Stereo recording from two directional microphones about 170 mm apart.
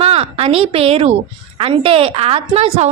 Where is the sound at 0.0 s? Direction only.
35° right (ahead or behind).